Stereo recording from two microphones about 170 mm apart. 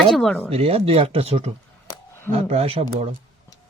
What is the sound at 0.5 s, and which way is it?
Speech, 35° right (ahead or behind).